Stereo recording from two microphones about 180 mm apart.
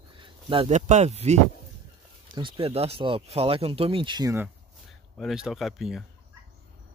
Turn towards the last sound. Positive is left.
turn(degrees=0)  # may be behind; listen again after turning